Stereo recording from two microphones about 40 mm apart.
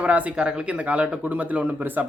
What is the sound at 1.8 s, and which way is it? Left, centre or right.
Speech, right.